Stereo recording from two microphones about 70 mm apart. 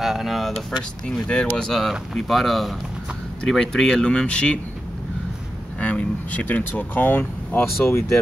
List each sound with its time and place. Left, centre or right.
0.0 s a sound: centre
1.0 s speech: centre
5.8 s speech: centre; by 8.2 s left